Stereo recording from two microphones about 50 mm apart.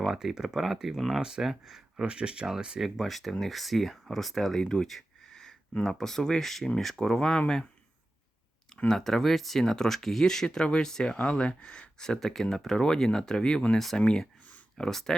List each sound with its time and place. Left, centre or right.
0.0 s speech: centre
2.0 s speech: centre
2.8 s speech: centre
8.9 s speech: centre
11.2 s speech: left
13.7 s speech: centre
14.0 s speech: centre